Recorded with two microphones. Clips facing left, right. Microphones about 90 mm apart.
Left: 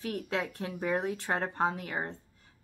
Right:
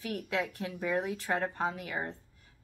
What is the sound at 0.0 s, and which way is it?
A woman's voice, 30° left (ahead or behind).